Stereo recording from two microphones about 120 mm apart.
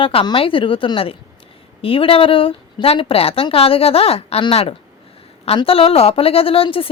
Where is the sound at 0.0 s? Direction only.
50° left (ahead or behind).